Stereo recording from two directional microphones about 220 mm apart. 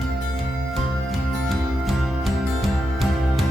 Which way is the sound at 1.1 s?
Centre (ahead or behind).